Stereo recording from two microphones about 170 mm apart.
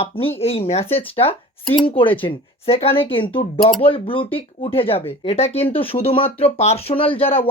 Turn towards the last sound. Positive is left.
turn(degrees=35)  # may be behind; listen again after turning